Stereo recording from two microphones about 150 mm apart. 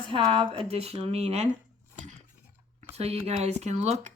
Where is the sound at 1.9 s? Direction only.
50° right (ahead or behind).